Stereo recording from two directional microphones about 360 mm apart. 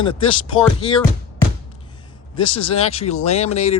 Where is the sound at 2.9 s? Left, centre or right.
Centre.